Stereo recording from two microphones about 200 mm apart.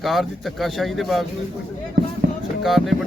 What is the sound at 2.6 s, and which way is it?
Speech, centre (ahead or behind).